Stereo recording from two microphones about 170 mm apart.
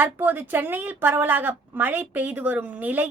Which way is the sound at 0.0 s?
10° right (ahead or behind).